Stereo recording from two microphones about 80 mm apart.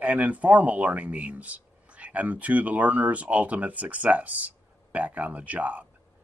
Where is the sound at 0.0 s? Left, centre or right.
Centre.